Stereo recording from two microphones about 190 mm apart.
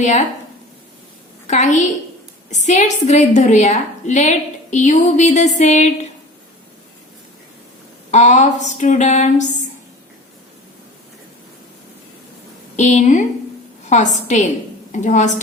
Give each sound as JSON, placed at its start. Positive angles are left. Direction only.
{"t": 1.5, "sound": "a woman's voice", "side_deg": 40}
{"t": 8.1, "sound": "a woman's voice", "side_deg": 40}
{"t": 12.7, "sound": "a woman's voice", "side_deg": 35}